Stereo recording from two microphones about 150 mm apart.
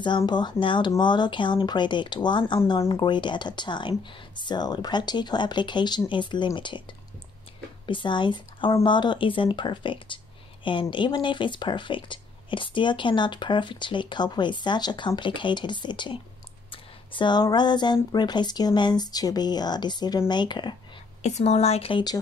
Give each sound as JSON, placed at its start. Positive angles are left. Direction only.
{"t": 0.2, "sound": "speech", "side_deg": 30}
{"t": 7.8, "sound": "speech", "side_deg": 35}
{"t": 21.2, "sound": "a woman's voice", "side_deg": 50}